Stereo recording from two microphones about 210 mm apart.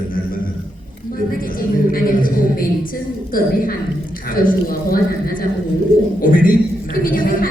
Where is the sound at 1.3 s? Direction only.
45° left (ahead or behind).